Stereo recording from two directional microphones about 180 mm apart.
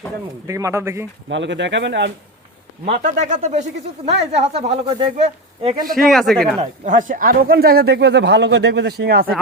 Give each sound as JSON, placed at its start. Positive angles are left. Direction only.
{"t": 0.4, "sound": "a man's voice", "side_deg": -15}
{"t": 1.3, "sound": "speech", "side_deg": -85}
{"t": 3.1, "sound": "speech", "side_deg": -45}
{"t": 6.0, "sound": "speech", "side_deg": 0}
{"t": 6.6, "sound": "speech", "side_deg": -45}